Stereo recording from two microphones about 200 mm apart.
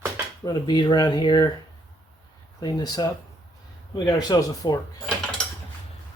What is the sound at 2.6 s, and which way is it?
Speech, 20° left (ahead or behind).